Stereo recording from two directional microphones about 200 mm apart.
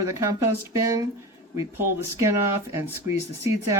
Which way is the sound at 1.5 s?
15° right (ahead or behind).